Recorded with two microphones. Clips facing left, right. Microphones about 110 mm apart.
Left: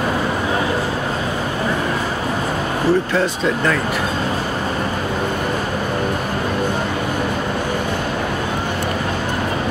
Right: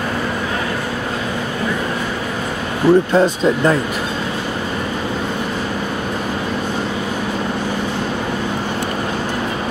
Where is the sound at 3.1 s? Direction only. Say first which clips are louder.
Right 4 dB; 25° right (ahead or behind).